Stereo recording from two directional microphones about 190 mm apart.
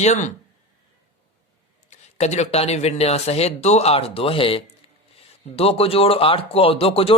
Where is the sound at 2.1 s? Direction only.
35° left (ahead or behind).